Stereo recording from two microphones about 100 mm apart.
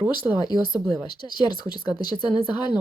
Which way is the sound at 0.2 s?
45° left (ahead or behind).